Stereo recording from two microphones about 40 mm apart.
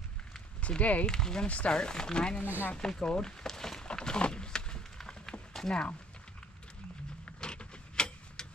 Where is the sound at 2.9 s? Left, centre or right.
Centre.